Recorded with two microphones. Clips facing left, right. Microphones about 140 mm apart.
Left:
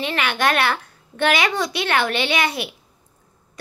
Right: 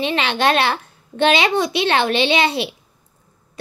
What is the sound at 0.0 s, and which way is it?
A child's voice, 20° right (ahead or behind).